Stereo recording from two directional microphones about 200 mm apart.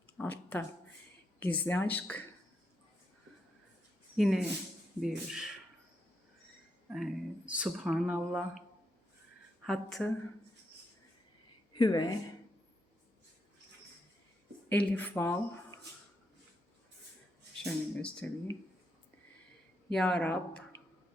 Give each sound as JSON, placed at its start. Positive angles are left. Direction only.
{"t": 0.2, "sound": "a sound", "side_deg": 10}
{"t": 1.4, "sound": "speech", "side_deg": 10}
{"t": 4.2, "sound": "speech", "side_deg": 0}
{"t": 6.9, "sound": "speech", "side_deg": -5}
{"t": 9.6, "sound": "speech", "side_deg": 0}
{"t": 11.7, "sound": "a woman's voice", "side_deg": 20}
{"t": 14.7, "sound": "speech", "side_deg": 10}
{"t": 17.6, "sound": "speech", "side_deg": 5}
{"t": 19.9, "sound": "speech", "side_deg": 5}